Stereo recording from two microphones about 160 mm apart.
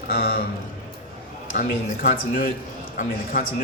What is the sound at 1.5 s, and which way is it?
Speech, 60° left (ahead or behind).